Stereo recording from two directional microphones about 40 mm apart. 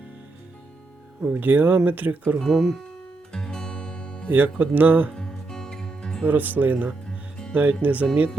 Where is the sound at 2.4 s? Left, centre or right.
Centre.